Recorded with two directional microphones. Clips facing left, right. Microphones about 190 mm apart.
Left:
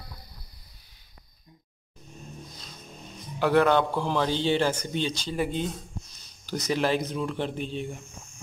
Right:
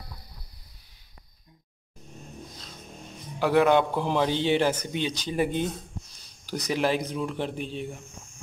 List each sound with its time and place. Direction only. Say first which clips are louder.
3.3 s a man's voice: right 1 dB; 10° right (ahead or behind)